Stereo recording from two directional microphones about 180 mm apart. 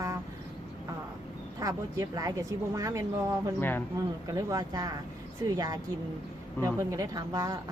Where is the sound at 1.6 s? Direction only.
20° right (ahead or behind).